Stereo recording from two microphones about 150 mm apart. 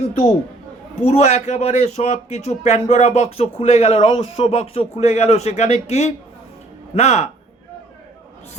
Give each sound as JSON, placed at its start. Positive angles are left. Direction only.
{"t": 1.0, "sound": "a man's voice", "side_deg": 50}